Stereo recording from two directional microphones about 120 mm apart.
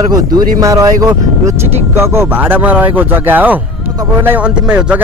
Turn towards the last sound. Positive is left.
turn(degrees=-10)  # may be behind; listen again after turning